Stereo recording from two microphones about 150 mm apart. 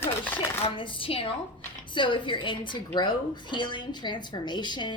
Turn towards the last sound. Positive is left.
turn(degrees=30)  # may be behind; listen again after turning